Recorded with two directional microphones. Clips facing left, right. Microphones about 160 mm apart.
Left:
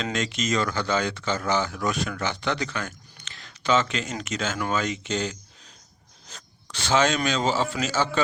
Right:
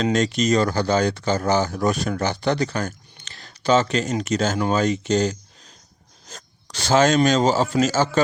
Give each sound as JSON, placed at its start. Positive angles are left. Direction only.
{"t": 0.0, "sound": "speech", "side_deg": -40}
{"t": 6.2, "sound": "rub", "side_deg": -40}
{"t": 7.3, "sound": "speech", "side_deg": -45}